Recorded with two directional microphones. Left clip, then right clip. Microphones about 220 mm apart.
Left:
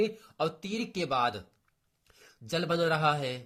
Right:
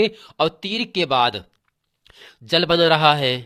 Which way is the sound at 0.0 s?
40° right (ahead or behind).